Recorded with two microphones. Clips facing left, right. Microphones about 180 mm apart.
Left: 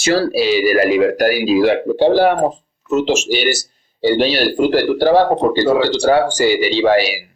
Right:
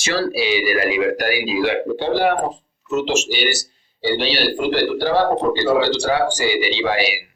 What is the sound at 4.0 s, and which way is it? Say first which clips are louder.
Speech: left 6 dB; 45° left (ahead or behind).